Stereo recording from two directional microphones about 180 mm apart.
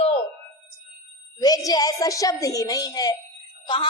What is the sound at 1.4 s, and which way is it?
A woman's voice, 20° left (ahead or behind).